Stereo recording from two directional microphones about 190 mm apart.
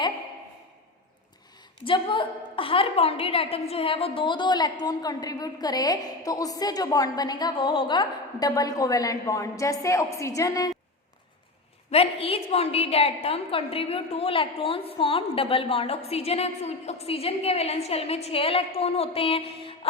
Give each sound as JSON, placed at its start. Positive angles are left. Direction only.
{"t": 1.8, "sound": "a woman's voice", "side_deg": 25}
{"t": 11.9, "sound": "a woman's voice", "side_deg": 30}